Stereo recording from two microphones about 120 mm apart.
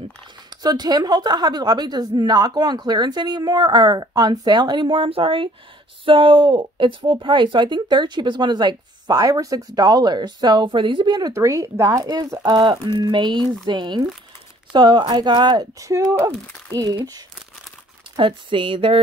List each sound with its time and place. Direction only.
0.6 s speech: 35° right (ahead or behind)
18.1 s speech: 45° right (ahead or behind)